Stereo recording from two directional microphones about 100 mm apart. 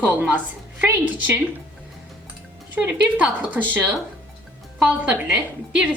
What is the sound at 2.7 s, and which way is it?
A woman's voice, 15° right (ahead or behind).